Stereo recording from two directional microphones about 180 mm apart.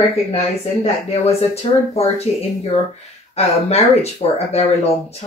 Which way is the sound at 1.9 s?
35° left (ahead or behind).